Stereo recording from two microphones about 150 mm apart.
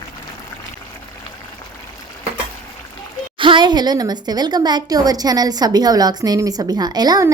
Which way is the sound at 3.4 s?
35° right (ahead or behind).